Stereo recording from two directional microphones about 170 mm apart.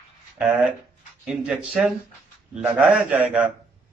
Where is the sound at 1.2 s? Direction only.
5° right (ahead or behind).